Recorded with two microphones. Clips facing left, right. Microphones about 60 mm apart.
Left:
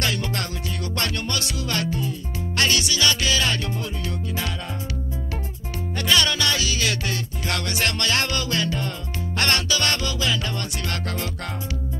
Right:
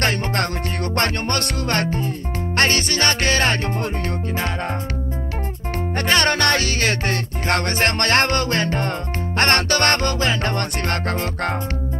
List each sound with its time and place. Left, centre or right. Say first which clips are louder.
0.0 s music: right 5 dB; right
5.9 s music: right 3 dB; right